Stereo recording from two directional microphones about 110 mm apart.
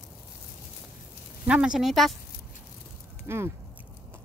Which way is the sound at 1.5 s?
5° right (ahead or behind).